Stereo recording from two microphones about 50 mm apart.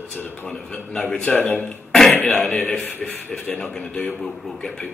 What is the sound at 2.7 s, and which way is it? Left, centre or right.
Speech, left.